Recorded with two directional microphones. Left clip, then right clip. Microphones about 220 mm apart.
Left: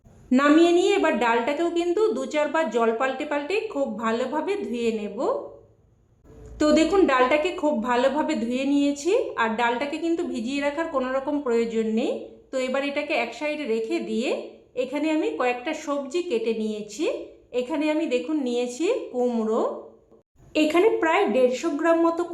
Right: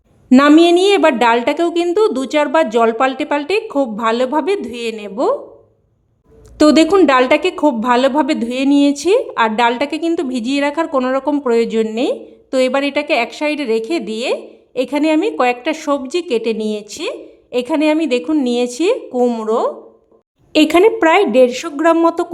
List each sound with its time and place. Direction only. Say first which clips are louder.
0.3 s a woman's voice: right 9 dB; 50° right (ahead or behind)
6.6 s a woman's voice: right 9 dB; 50° right (ahead or behind)